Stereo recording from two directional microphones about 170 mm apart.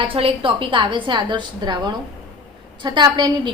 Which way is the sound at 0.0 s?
35° right (ahead or behind).